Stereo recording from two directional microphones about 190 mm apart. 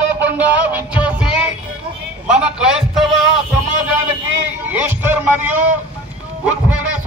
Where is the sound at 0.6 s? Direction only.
10° right (ahead or behind).